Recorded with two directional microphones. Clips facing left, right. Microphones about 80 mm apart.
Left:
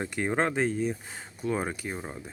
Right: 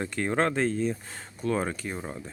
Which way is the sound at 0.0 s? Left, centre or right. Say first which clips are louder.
Right 1 dB; centre.